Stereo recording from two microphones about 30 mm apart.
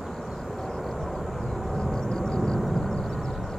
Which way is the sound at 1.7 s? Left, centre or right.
Left.